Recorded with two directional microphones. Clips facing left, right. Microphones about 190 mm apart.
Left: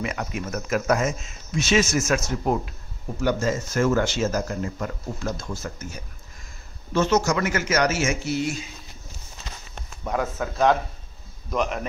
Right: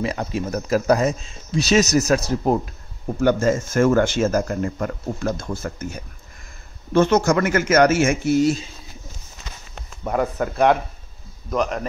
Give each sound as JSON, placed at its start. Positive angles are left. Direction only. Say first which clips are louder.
{"t": 0.0, "sound": "speech", "louder": "right 5 dB", "side_deg": -30}
{"t": 3.2, "sound": "speech", "louder": "right 5 dB", "side_deg": -55}
{"t": 6.9, "sound": "speech", "louder": "right 5 dB", "side_deg": -55}
{"t": 9.8, "sound": "speech", "louder": "right 4 dB", "side_deg": -10}
{"t": 11.5, "sound": "a man's voice", "louder": "right 3 dB", "side_deg": 0}